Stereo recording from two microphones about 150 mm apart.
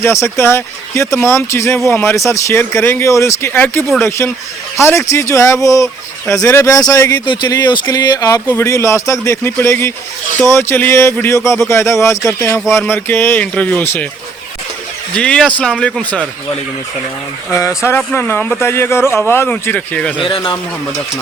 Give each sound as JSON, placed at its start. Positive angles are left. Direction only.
{"t": 0.0, "sound": "speech", "side_deg": 20}
{"t": 15.1, "sound": "speech", "side_deg": 5}
{"t": 17.5, "sound": "speech", "side_deg": 20}
{"t": 20.2, "sound": "a man's voice", "side_deg": 35}